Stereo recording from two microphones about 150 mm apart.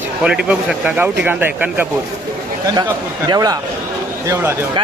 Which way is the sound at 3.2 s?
25° right (ahead or behind).